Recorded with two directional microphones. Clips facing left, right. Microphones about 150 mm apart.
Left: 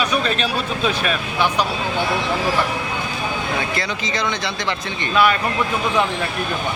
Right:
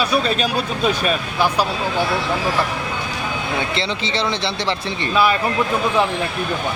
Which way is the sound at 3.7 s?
30° right (ahead or behind).